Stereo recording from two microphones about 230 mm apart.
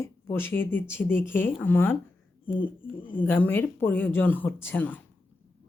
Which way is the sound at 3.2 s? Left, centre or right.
Centre.